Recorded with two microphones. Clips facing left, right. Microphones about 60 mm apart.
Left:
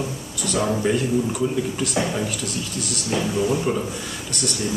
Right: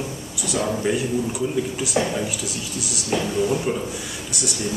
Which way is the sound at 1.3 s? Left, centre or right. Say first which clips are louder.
Left 1 dB; centre.